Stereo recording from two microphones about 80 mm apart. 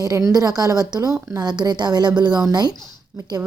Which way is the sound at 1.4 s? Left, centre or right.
Right.